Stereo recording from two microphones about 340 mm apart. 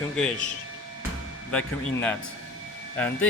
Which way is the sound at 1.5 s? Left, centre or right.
Centre.